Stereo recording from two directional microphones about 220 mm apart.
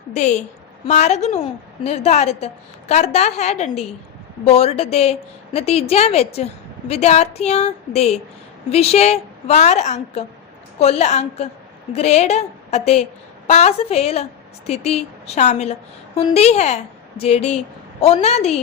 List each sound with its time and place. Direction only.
0.1 s a woman's voice: 30° left (ahead or behind)